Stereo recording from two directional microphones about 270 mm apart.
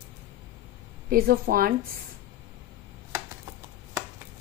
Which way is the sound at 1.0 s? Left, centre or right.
Right.